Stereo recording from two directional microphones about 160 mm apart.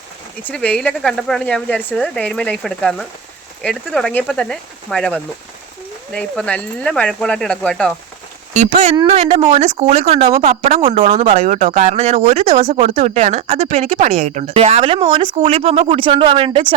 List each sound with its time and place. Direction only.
0.4 s speech: 10° left (ahead or behind)
6.1 s speech: 5° left (ahead or behind)
8.5 s speech: 45° right (ahead or behind)